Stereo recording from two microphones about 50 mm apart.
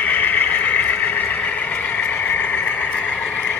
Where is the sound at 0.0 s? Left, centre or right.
Left.